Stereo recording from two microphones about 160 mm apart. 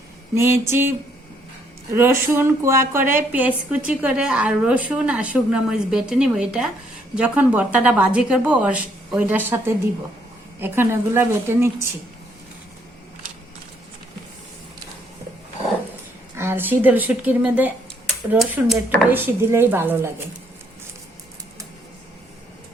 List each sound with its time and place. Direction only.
0.3 s a woman's voice: 15° right (ahead or behind)
2.0 s a woman's voice: 15° right (ahead or behind)
16.3 s a woman's voice: 15° right (ahead or behind)